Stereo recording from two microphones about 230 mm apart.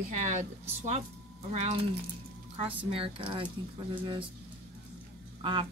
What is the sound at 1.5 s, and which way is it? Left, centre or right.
A woman's voice, right.